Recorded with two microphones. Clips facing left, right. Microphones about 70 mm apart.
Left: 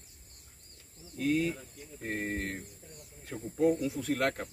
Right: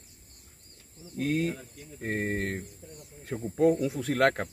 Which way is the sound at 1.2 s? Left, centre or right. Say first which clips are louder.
Right 1 dB; right.